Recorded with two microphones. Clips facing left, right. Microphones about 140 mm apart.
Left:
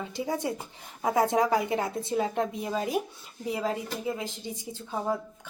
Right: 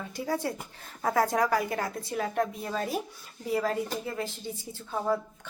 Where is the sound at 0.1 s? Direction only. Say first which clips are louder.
Right 1 dB; 20° left (ahead or behind).